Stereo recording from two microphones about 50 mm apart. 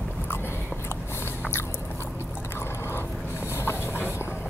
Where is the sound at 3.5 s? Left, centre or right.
Left.